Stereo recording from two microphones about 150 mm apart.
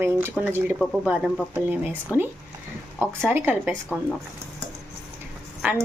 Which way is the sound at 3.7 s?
5° left (ahead or behind).